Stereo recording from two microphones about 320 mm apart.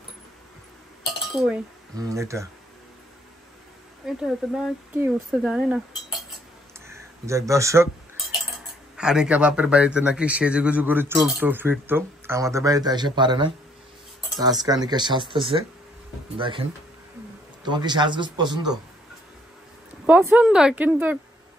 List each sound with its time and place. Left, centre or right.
1.4 s a man's voice: centre
4.0 s a man's voice: centre
6.9 s speech: centre
8.9 s a man's voice: centre
17.6 s a man's voice: centre
20.1 s a man's voice: centre